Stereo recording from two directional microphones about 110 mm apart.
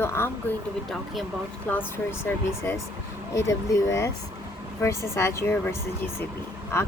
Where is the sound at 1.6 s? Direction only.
15° left (ahead or behind).